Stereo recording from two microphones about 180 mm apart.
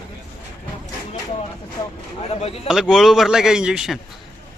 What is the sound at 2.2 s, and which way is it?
Speech, 35° left (ahead or behind).